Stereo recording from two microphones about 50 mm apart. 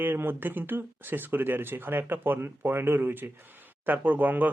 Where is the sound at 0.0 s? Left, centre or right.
Right.